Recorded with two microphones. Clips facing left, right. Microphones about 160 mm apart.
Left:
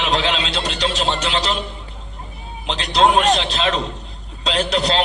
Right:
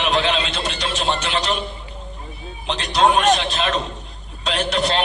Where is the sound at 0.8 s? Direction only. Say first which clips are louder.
Left 2 dB; 35° left (ahead or behind).